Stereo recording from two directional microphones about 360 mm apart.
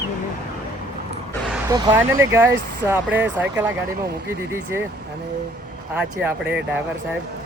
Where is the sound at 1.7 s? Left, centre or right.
Centre.